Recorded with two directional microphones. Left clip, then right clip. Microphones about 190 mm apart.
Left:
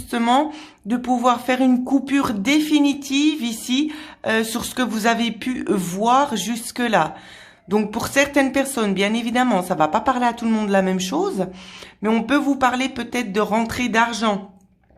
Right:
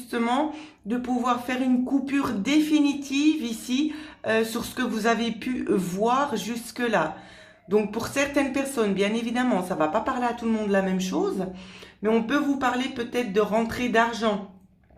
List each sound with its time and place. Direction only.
0.1 s speech: 45° left (ahead or behind)